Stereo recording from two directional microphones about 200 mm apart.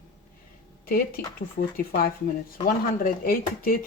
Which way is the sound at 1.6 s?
45° left (ahead or behind).